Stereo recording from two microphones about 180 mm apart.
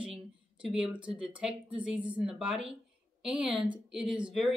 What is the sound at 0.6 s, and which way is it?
A woman's voice, centre (ahead or behind).